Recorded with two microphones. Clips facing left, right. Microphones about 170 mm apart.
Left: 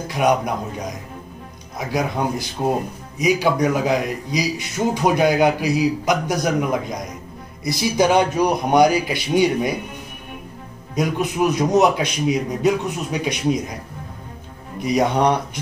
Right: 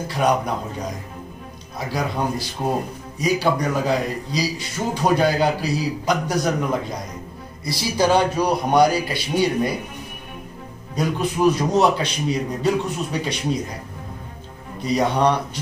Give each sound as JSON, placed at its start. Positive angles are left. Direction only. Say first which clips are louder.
{"t": 0.1, "sound": "speech", "louder": "left 2 dB", "side_deg": 15}
{"t": 1.9, "sound": "speech", "louder": "left 2 dB", "side_deg": 20}
{"t": 11.0, "sound": "speech", "louder": "left 1 dB", "side_deg": 15}
{"t": 14.8, "sound": "speech", "louder": "left 1 dB", "side_deg": 20}